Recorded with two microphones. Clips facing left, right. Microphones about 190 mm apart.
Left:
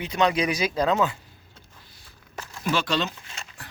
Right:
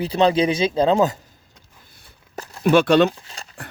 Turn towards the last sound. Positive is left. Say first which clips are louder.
# right 2 dB
turn(degrees=-35)  # may be behind; listen again after turning